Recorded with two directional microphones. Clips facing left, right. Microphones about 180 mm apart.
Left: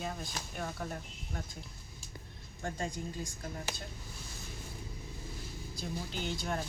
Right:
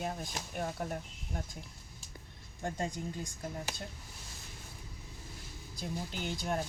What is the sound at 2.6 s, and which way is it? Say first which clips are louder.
Speech: right 1 dB; 20° right (ahead or behind).